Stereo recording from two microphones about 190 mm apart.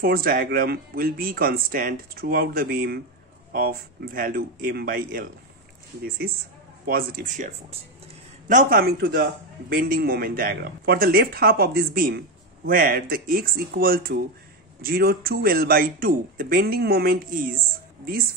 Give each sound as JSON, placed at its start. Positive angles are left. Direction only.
{"t": 0.0, "sound": "speech", "side_deg": -50}